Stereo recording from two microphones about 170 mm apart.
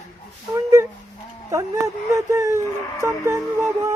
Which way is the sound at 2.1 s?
20° right (ahead or behind).